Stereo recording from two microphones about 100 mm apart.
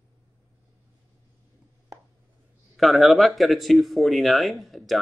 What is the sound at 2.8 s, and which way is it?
Speech, centre (ahead or behind).